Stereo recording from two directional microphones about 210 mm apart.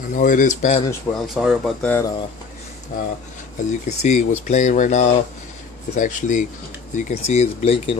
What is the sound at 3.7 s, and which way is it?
Speech, 35° left (ahead or behind).